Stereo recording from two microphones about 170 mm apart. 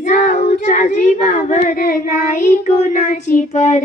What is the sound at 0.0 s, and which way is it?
Child singing, 45° left (ahead or behind).